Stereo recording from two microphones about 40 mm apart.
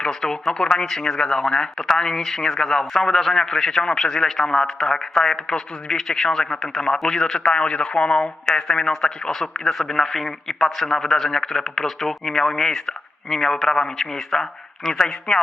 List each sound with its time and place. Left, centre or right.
0.0 s a man's voice: centre
7.4 s a man's voice: left